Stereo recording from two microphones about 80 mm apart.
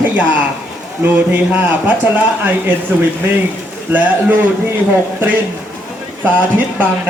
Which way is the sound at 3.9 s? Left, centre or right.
Centre.